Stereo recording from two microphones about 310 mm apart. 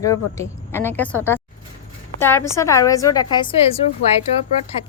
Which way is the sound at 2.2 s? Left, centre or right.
Centre.